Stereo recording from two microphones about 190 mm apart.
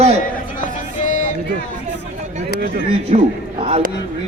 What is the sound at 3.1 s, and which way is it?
Speech, 35° right (ahead or behind).